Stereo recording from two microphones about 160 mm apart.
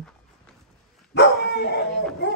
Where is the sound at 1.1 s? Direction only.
90° left.